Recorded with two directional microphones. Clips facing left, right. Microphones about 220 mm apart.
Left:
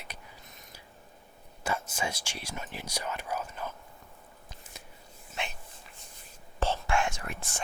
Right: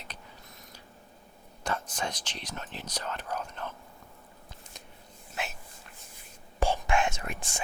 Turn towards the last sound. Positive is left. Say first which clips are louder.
# right 1 dB
turn(degrees=-15)  # may be behind; listen again after turning